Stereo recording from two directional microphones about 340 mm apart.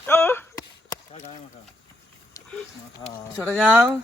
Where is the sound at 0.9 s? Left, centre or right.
Centre.